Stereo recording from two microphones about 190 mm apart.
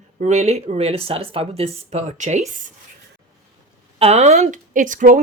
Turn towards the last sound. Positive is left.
turn(degrees=-45)  # may be behind; listen again after turning